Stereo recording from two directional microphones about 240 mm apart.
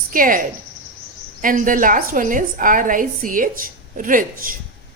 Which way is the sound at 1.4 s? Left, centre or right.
Right.